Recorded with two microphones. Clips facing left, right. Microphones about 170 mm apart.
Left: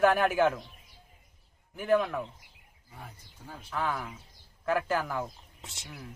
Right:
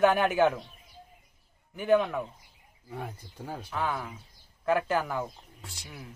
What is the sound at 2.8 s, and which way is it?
Speech, 75° right (ahead or behind).